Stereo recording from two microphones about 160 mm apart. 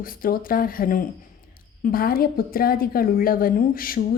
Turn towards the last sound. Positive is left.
turn(degrees=65)  # may be behind; listen again after turning